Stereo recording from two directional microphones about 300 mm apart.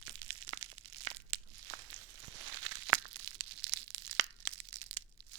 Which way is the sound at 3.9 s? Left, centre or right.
Right.